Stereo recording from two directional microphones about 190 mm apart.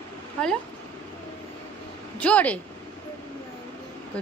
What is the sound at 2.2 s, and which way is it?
Speech, 10° left (ahead or behind).